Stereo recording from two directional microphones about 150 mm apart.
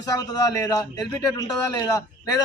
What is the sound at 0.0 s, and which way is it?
A man's voice, 25° left (ahead or behind).